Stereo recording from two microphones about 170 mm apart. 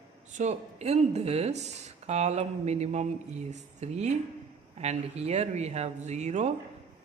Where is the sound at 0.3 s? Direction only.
40° right (ahead or behind).